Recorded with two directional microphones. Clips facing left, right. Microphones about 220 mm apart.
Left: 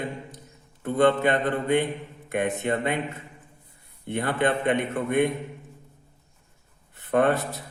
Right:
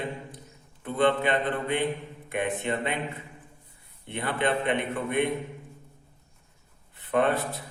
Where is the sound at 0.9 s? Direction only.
45° left (ahead or behind).